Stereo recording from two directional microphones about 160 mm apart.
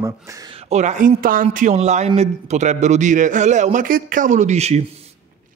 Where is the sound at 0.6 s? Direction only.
45° right (ahead or behind).